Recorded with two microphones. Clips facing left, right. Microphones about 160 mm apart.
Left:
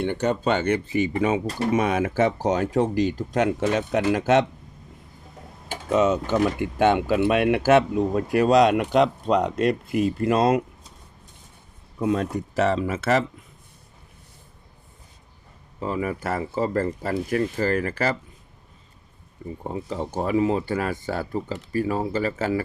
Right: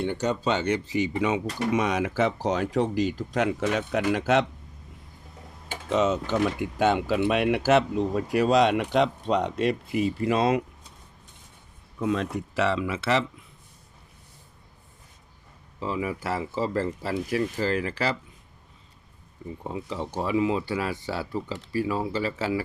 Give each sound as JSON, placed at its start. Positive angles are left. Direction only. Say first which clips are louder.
{"t": 0.0, "sound": "speech", "louder": "left 3 dB", "side_deg": 60}
{"t": 6.3, "sound": "speech", "louder": "left 3 dB", "side_deg": 55}
{"t": 11.9, "sound": "speech", "louder": "left 3 dB", "side_deg": 40}
{"t": 15.8, "sound": "speech", "louder": "left 3 dB", "side_deg": 50}
{"t": 19.4, "sound": "speech", "louder": "left 3 dB", "side_deg": 45}